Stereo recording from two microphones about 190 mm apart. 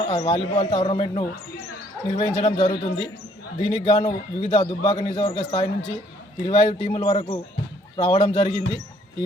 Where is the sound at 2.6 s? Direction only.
20° left (ahead or behind).